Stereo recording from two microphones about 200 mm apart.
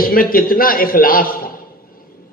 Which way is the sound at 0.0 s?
45° left (ahead or behind).